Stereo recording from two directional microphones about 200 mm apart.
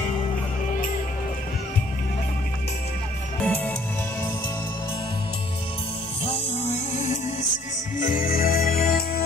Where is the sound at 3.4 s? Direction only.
10° left (ahead or behind).